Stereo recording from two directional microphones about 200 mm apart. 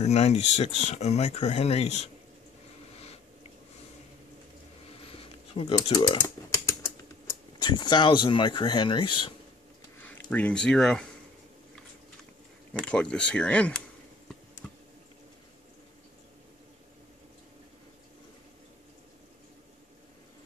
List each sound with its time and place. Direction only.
0.0 s speech: 35° left (ahead or behind)
2.9 s a sound: 30° left (ahead or behind)
5.0 s computer keyboard: 30° left (ahead or behind)
5.9 s speech: 15° left (ahead or behind)
7.5 s speech: 20° left (ahead or behind)
10.0 s speech: 10° left (ahead or behind)
12.7 s speech: 5° left (ahead or behind)